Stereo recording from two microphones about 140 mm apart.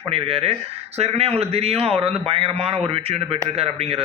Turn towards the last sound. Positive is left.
turn(degrees=-45)  # may be behind; listen again after turning